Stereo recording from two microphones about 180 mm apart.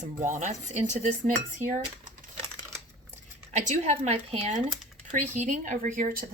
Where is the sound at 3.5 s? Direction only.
40° right (ahead or behind).